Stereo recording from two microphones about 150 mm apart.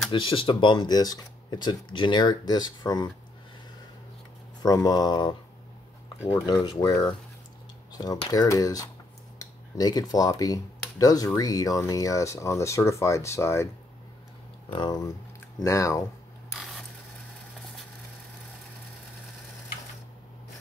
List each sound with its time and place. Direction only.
0.1 s speech: 35° left (ahead or behind)
4.6 s speech: 25° left (ahead or behind)
6.4 s speech: 30° left (ahead or behind)
8.3 s speech: 25° left (ahead or behind)
14.7 s speech: 30° left (ahead or behind)
16.5 s mechanisms: centre (ahead or behind)